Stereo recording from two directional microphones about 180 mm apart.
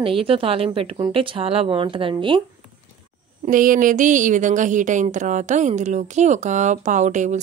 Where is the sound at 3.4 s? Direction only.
50° right (ahead or behind).